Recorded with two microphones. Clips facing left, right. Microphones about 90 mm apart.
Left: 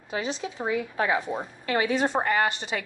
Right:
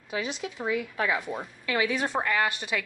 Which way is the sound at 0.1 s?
30° left (ahead or behind).